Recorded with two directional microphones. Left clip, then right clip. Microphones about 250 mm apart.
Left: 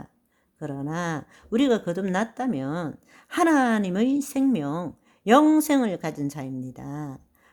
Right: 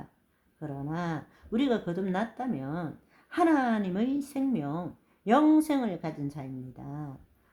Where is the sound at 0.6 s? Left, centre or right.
Left.